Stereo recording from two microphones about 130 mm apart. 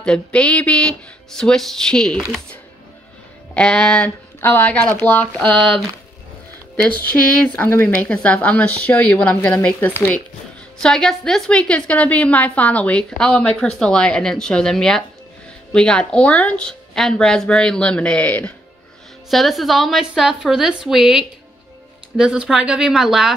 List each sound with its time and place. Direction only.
0.0 s a woman's voice: 5° left (ahead or behind)
4.4 s a woman's voice: 20° left (ahead or behind)
5.4 s a woman's voice: 5° left (ahead or behind)
6.8 s a woman's voice: 10° left (ahead or behind)